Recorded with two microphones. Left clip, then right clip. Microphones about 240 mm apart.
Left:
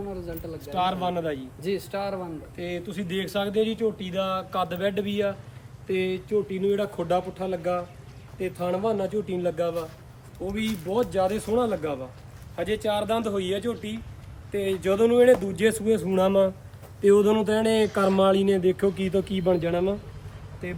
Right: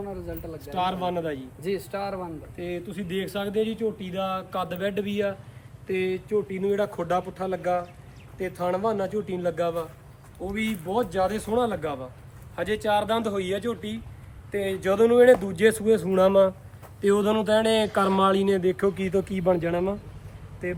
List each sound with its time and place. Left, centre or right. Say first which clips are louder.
0.1 s speech: left 1 dB; centre
6.6 s speech: even; centre